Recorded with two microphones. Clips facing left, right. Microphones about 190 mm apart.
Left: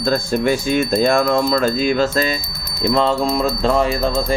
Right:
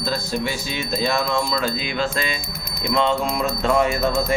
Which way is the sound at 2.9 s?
35° left (ahead or behind).